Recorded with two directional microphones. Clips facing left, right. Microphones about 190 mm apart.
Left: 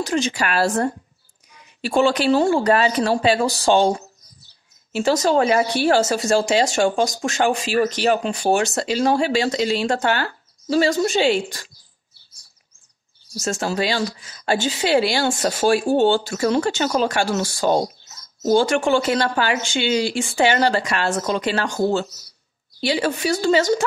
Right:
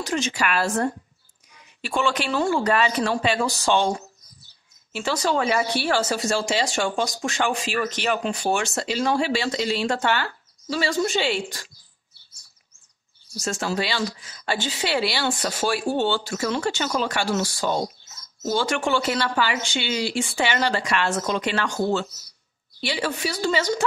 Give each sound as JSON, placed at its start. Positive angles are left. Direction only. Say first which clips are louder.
{"t": 0.0, "sound": "speech", "louder": "left 3 dB", "side_deg": 35}
{"t": 4.9, "sound": "speech", "louder": "left 6 dB", "side_deg": 40}
{"t": 13.4, "sound": "speech", "louder": "left 3 dB", "side_deg": 45}